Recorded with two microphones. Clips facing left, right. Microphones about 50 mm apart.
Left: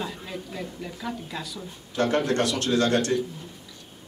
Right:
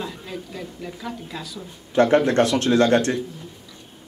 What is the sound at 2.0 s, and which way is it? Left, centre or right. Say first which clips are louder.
Speech: right 7 dB; right.